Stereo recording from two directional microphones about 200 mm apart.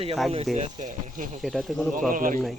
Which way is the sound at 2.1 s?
40° right (ahead or behind).